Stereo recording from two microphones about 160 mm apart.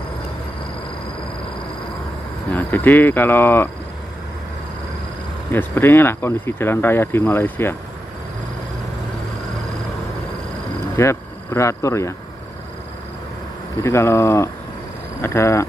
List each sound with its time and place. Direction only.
2.5 s speech: 10° left (ahead or behind)
5.5 s speech: 15° left (ahead or behind)
11.0 s speech: 15° left (ahead or behind)
13.8 s speech: 20° left (ahead or behind)